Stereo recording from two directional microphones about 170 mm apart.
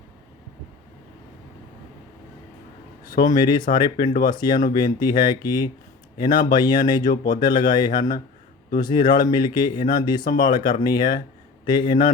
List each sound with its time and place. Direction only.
3.1 s speech: 25° left (ahead or behind)